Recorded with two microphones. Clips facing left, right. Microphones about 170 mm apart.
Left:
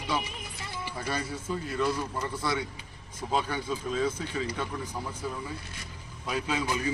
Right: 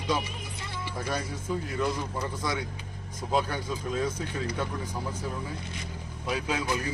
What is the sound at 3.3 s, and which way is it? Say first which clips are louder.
Speech: right 1 dB; 10° right (ahead or behind).